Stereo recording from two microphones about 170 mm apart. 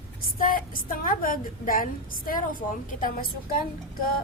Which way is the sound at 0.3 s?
55° left (ahead or behind).